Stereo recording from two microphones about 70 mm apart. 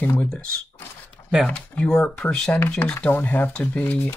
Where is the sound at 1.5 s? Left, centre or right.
Centre.